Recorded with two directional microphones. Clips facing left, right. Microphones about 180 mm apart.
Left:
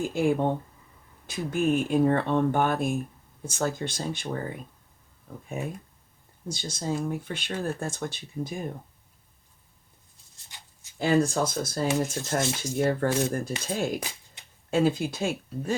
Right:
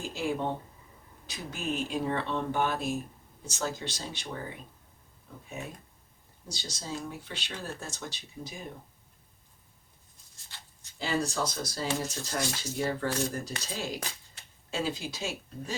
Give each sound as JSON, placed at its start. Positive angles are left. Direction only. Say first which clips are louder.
{"t": 0.0, "sound": "speech", "louder": "left 7 dB", "side_deg": 55}
{"t": 6.5, "sound": "speech", "louder": "left 8 dB", "side_deg": 55}
{"t": 10.5, "sound": "a sound", "louder": "left 1 dB", "side_deg": 15}
{"t": 10.9, "sound": "speech", "louder": "left 8 dB", "side_deg": 55}
{"t": 14.4, "sound": "a sound", "louder": "left 1 dB", "side_deg": 15}
{"t": 14.7, "sound": "speech", "louder": "left 9 dB", "side_deg": 55}